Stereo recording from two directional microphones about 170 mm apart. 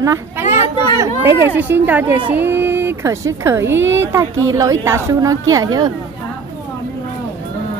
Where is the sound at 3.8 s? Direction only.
90° right.